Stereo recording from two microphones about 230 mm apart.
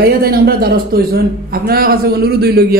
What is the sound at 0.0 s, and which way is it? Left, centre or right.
A man's voice, right.